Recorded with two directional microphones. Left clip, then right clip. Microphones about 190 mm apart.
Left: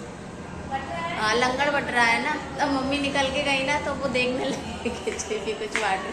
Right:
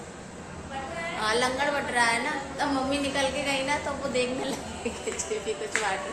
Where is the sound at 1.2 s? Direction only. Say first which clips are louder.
Left 3 dB; 5° right (ahead or behind).